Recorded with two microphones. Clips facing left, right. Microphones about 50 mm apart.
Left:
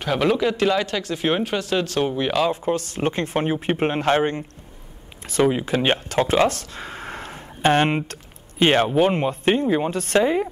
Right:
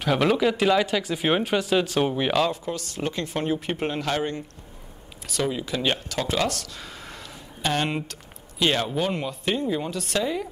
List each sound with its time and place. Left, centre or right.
0.0 s speech: centre
2.5 s speech: left